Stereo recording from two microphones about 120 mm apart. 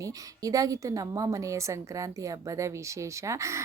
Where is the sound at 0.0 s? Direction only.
30° right (ahead or behind).